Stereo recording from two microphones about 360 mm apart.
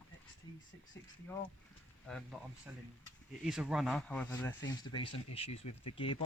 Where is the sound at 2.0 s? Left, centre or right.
Centre.